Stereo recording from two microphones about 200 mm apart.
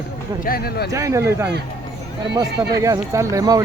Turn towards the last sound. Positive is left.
turn(degrees=-15)  # may be behind; listen again after turning